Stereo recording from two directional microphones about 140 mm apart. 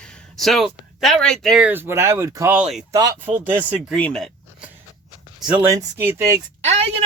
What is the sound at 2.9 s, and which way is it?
Speech, 25° right (ahead or behind).